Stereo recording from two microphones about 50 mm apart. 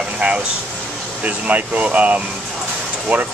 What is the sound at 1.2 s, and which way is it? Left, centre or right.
Speech, right.